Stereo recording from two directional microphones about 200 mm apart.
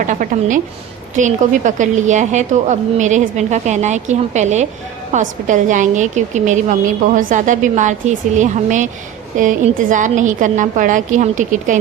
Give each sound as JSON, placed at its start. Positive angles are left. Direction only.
{"t": 0.1, "sound": "a woman's voice", "side_deg": -40}